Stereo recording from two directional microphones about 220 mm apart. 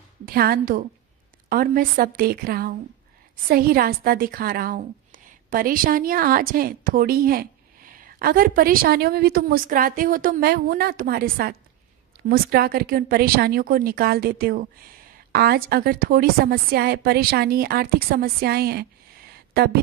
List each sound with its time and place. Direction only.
0.3 s a woman's voice: 45° right (ahead or behind)